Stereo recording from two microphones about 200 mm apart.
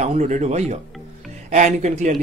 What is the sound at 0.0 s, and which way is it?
Speech, 35° right (ahead or behind).